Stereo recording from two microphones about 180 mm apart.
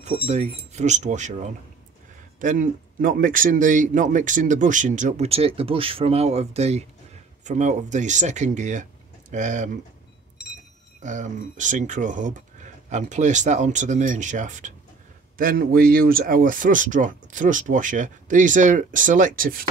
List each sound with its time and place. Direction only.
0.0 s speech: 40° right (ahead or behind)
11.0 s speech: 40° right (ahead or behind)